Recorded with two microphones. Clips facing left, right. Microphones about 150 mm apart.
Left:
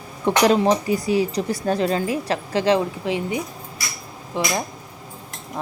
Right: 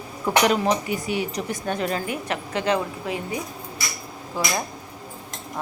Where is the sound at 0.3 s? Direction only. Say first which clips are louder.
Left 3 dB; 30° left (ahead or behind).